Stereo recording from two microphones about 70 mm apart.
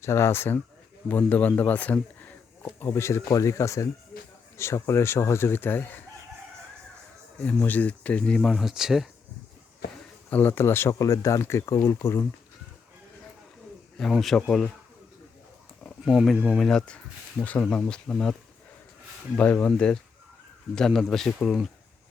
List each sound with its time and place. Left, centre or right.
0.0 s speech: left
1.0 s a man's voice: left
7.3 s speech: left
8.4 s speech: centre
10.2 s speech: left
10.9 s speech: left
14.1 s speech: centre
15.8 s speech: centre
16.6 s speech: centre
19.4 s speech: left; by 21.7 s centre